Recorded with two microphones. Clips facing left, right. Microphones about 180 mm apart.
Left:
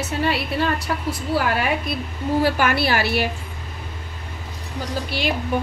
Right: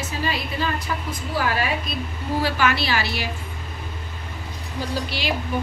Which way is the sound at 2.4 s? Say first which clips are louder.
Left 2 dB; 50° left (ahead or behind).